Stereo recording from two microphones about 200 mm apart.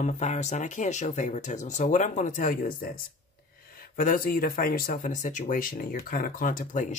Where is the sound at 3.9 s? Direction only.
45° left (ahead or behind).